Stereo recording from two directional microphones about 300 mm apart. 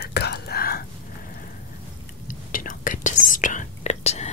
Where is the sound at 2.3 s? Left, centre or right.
Left.